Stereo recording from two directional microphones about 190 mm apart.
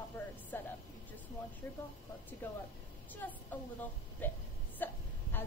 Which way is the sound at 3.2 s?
10° left (ahead or behind).